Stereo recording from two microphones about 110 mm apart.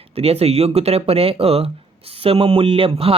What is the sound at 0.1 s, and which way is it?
Speech, 70° right (ahead or behind).